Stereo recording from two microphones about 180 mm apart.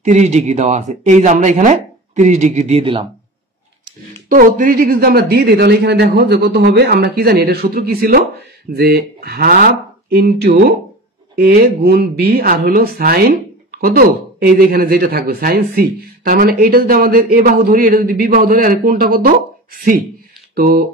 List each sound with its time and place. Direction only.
0.0 s speech: 40° right (ahead or behind)
4.3 s speech: 50° right (ahead or behind)